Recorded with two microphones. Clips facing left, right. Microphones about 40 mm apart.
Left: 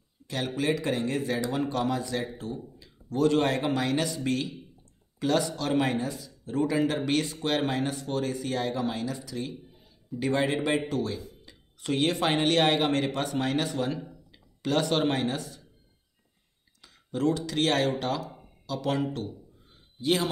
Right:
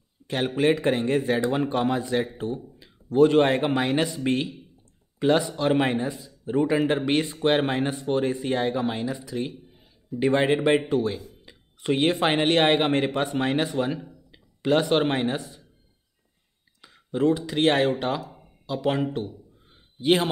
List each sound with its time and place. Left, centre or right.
0.6 s speech: right
16.8 s a man's voice: right